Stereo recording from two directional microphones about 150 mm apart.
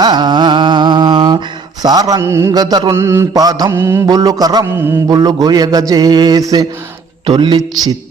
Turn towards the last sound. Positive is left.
turn(degrees=-30)  # may be behind; listen again after turning